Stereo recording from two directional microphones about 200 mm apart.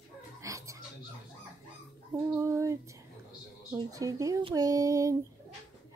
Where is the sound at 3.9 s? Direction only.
15° right (ahead or behind).